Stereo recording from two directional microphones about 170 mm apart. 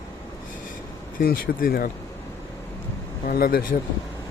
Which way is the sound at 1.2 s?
60° left (ahead or behind).